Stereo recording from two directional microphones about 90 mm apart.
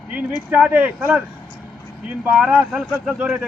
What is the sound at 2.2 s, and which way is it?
Speech, 15° right (ahead or behind).